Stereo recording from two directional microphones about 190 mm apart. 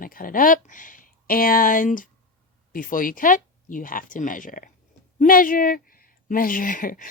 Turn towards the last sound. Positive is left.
turn(degrees=45)  # may be behind; listen again after turning